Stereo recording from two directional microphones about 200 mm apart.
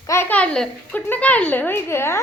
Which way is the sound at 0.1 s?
10° left (ahead or behind).